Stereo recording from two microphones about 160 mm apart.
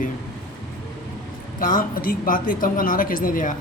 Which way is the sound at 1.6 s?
55° left (ahead or behind).